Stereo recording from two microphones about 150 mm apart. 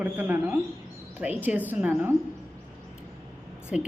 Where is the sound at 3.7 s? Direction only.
5° right (ahead or behind).